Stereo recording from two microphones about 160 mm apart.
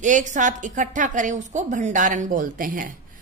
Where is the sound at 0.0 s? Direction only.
50° right (ahead or behind).